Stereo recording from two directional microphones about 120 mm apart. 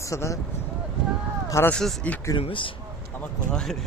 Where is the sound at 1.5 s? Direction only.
20° left (ahead or behind).